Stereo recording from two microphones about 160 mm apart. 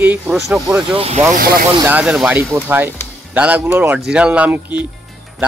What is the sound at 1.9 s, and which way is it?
Speech, 10° right (ahead or behind).